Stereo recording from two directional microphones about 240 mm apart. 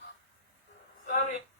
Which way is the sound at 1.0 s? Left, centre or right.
Left.